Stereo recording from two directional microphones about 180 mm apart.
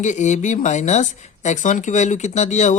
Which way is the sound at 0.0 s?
40° left (ahead or behind).